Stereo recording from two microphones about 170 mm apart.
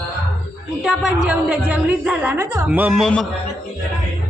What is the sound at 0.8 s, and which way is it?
A woman's voice, 5° right (ahead or behind).